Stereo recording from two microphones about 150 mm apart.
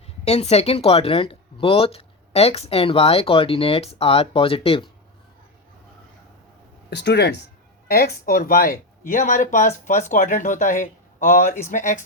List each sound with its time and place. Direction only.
0.3 s speech: 45° left (ahead or behind)
7.9 s speech: 85° left; by 12.0 s 60° left (ahead or behind)